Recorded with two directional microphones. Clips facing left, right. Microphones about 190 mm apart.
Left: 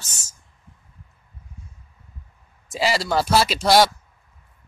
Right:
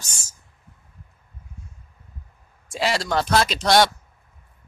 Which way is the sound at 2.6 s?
Centre (ahead or behind).